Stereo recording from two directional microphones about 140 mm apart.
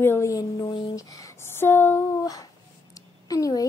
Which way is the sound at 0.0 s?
20° left (ahead or behind).